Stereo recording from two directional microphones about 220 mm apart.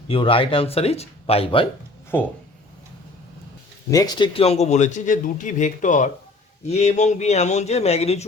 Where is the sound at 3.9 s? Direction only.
20° left (ahead or behind).